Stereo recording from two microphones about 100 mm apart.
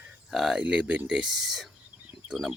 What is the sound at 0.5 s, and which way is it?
Speech, 15° right (ahead or behind).